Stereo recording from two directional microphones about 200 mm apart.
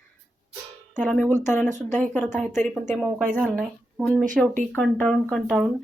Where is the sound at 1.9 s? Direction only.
10° left (ahead or behind).